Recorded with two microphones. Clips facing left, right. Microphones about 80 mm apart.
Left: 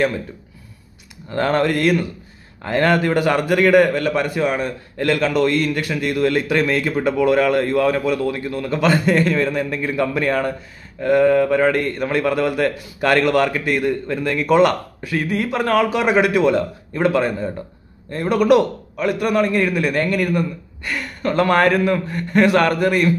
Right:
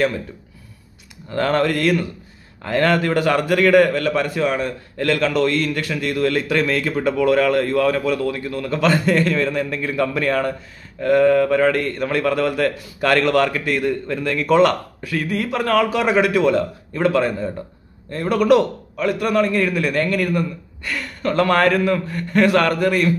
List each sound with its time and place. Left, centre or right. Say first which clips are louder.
1.3 s a man's voice: left 1 dB; left